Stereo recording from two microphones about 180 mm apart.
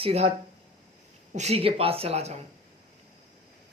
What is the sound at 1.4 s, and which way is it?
Speech, 35° right (ahead or behind).